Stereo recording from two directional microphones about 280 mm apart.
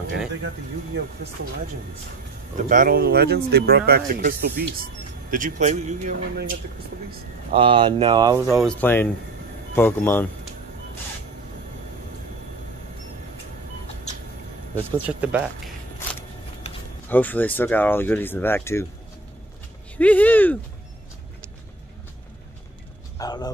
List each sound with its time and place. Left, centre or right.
0.9 s speech: right
2.5 s speech: right
7.5 s speech: centre
8.6 s speech: centre
15.0 s speech: centre
17.1 s speech: centre
20.0 s speech: centre
23.1 s speech: centre